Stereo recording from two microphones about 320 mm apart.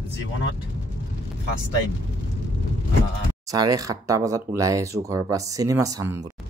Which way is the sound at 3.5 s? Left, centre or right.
Centre.